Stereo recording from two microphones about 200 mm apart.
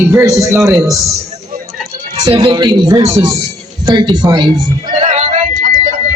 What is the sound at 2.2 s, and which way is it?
A man's voice, 20° right (ahead or behind).